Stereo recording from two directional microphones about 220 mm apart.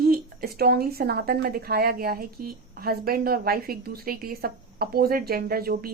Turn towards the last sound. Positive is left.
turn(degrees=-40)  # may be behind; listen again after turning